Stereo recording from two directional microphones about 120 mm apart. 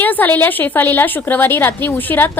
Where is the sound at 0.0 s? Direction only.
15° left (ahead or behind).